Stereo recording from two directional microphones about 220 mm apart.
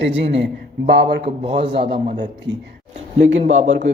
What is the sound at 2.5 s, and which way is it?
Speech, 55° right (ahead or behind).